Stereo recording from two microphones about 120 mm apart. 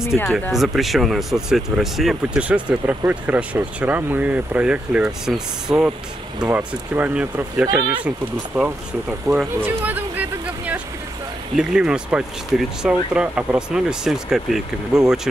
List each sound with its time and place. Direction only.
0.1 s speech: centre (ahead or behind)
9.3 s speech: 30° right (ahead or behind)
9.6 s a sound: 15° right (ahead or behind)
11.5 s speech: 5° right (ahead or behind)